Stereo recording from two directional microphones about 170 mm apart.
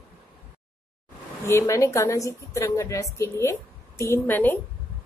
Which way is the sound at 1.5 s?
15° left (ahead or behind).